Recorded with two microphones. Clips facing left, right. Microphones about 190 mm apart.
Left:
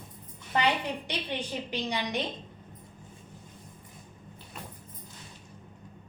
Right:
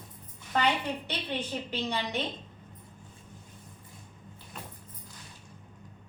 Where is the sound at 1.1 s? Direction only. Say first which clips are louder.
Even; 15° left (ahead or behind).